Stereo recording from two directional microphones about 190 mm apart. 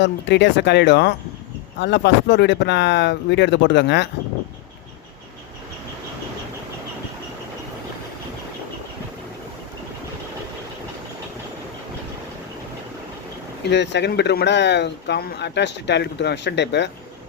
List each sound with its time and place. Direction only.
0.0 s speech: 70° left (ahead or behind)
13.7 s speech: 65° left (ahead or behind)